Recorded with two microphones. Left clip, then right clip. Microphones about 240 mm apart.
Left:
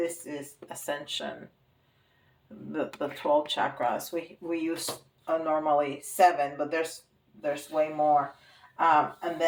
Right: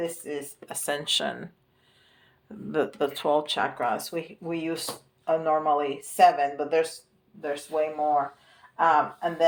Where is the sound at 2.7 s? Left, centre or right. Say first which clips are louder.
Right 6 dB; right.